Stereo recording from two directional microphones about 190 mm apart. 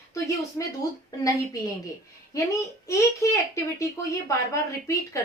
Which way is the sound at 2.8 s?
15° left (ahead or behind).